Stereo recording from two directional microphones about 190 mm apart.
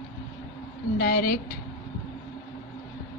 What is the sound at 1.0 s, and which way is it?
Speech, 50° left (ahead or behind).